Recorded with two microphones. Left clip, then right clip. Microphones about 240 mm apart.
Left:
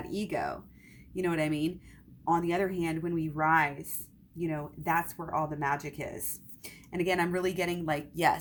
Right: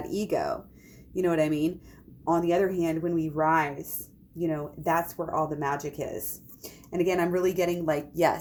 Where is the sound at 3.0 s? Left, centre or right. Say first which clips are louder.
Right 5 dB; left.